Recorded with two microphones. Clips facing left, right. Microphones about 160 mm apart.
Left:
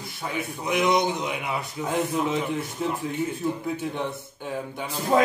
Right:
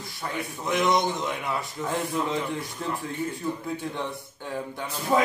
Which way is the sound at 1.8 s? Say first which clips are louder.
Left 4 dB; 20° left (ahead or behind).